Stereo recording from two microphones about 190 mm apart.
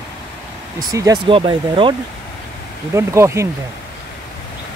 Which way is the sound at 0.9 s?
20° right (ahead or behind).